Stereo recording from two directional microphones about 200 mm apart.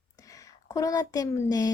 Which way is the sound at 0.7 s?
15° left (ahead or behind).